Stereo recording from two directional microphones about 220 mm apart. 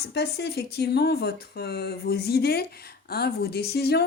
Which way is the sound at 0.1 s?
50° left (ahead or behind).